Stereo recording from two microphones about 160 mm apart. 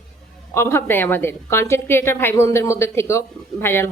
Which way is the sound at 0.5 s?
15° left (ahead or behind).